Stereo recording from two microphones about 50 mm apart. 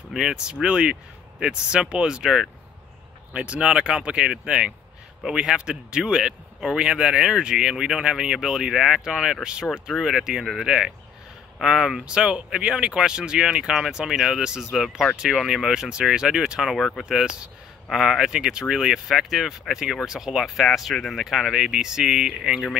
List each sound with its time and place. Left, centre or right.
0.2 s speech: centre
9.7 s speech: centre
16.7 s speech: centre
17.0 s speech: centre